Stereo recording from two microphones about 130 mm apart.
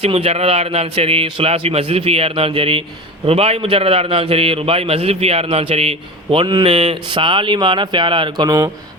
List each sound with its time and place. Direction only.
0.0 s a man's voice: 50° right (ahead or behind)
6.4 s a man's voice: 35° right (ahead or behind)
6.7 s a man's voice: 55° right (ahead or behind)
7.1 s a man's voice: 40° right (ahead or behind)